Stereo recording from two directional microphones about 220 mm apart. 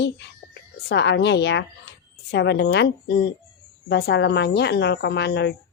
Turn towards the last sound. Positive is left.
turn(degrees=50)  # may be behind; listen again after turning